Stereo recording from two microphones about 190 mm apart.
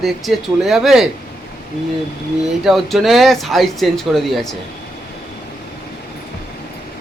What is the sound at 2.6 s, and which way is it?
Speech, centre (ahead or behind).